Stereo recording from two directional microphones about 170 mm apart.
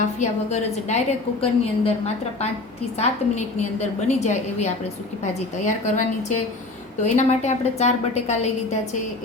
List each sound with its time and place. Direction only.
0.2 s a woman's voice: 40° left (ahead or behind)
3.0 s a woman's voice: 40° left (ahead or behind)